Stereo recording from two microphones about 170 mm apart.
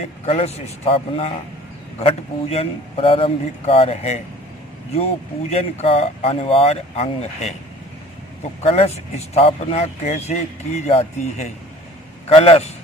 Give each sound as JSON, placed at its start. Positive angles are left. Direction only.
{"t": 0.0, "sound": "speech", "side_deg": 35}
{"t": 5.5, "sound": "speech", "side_deg": 40}
{"t": 8.6, "sound": "speech", "side_deg": 35}